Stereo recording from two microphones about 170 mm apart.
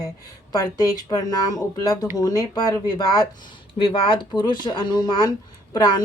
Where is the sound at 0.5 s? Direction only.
20° left (ahead or behind).